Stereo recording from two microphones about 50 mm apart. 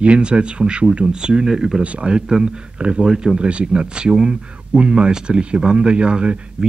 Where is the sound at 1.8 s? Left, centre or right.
Right.